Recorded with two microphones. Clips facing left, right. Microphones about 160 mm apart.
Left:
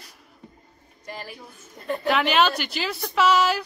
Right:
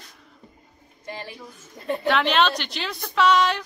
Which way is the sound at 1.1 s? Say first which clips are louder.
Right 1 dB; 25° right (ahead or behind).